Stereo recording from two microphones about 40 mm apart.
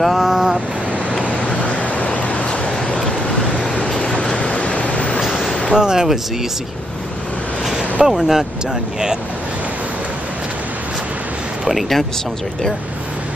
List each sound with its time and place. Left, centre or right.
0.0 s a sound: centre
1.2 s vehicle: left
3.4 s vehicle: left
3.9 s vehicle: centre
4.4 s a sound: left
5.2 s a sound: centre
5.7 s speech: centre
8.1 s speech: centre
11.7 s speech: centre